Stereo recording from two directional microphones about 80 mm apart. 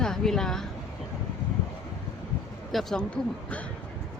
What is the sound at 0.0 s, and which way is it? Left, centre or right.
Speech, centre.